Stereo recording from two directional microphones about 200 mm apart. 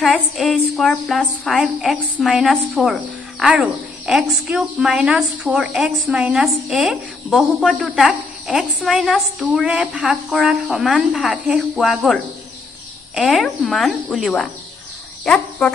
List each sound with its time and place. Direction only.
0.0 s a woman's voice: centre (ahead or behind)
15.2 s cricket: 5° left (ahead or behind)